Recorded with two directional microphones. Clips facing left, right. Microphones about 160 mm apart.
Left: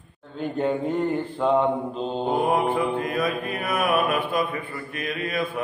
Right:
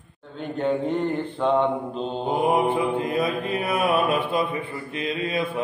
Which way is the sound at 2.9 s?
25° right (ahead or behind).